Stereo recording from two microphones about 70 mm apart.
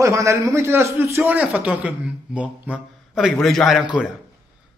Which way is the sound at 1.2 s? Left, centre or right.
Right.